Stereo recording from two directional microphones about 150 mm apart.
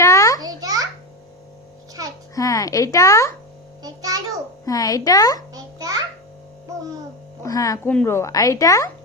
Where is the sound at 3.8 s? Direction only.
25° right (ahead or behind).